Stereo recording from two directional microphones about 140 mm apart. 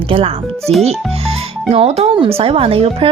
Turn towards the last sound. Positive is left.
turn(degrees=-45)  # may be behind; listen again after turning